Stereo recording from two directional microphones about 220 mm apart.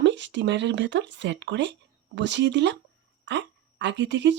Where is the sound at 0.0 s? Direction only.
55° right (ahead or behind).